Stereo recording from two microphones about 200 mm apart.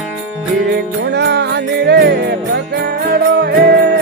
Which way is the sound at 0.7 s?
60° right (ahead or behind).